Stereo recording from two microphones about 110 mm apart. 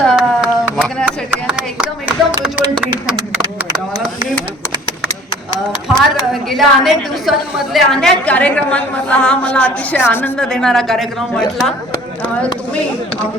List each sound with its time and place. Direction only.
0.2 s a sound: 5° right (ahead or behind)
2.4 s speech: 5° right (ahead or behind)
5.9 s a woman's voice: centre (ahead or behind); by 10.3 s 20° left (ahead or behind)
10.3 s a woman's voice: 5° left (ahead or behind)